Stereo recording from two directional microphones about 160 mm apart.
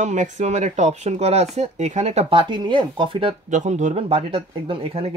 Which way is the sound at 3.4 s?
50° right (ahead or behind).